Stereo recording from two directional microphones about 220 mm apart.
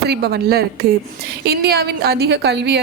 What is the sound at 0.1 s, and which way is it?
Speech, 45° right (ahead or behind).